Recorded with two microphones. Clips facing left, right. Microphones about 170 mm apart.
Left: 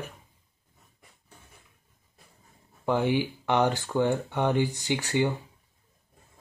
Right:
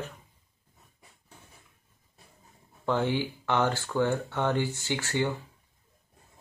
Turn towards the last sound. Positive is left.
turn(degrees=15)  # may be behind; listen again after turning